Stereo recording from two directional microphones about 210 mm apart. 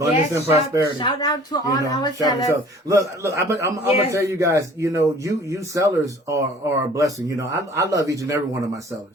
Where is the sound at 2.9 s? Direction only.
15° right (ahead or behind).